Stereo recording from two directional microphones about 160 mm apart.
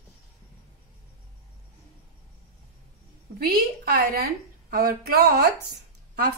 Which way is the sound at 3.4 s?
75° right (ahead or behind).